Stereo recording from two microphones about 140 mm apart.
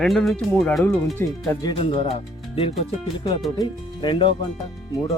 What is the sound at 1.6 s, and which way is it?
Speech, 40° left (ahead or behind).